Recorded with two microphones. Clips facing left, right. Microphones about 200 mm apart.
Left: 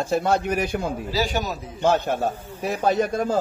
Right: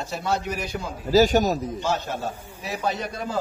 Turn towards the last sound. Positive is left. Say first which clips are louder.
# left 7 dB
turn(degrees=45)  # may be behind; listen again after turning